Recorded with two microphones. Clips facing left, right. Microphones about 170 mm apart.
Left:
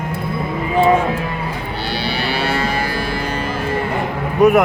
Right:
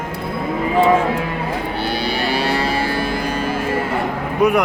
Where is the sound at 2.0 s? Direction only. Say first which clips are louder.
Even; 40° right (ahead or behind).